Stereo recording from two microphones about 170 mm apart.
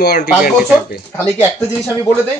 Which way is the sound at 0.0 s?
70° left (ahead or behind).